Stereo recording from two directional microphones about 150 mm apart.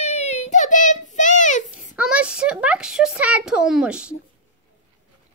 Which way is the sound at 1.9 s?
5° right (ahead or behind).